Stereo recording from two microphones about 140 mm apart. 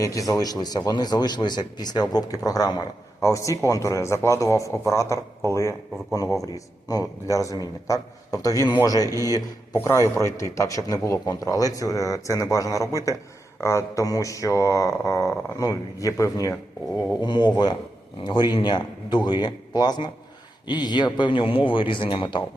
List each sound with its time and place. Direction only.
0.0 s a man's voice: 25° left (ahead or behind)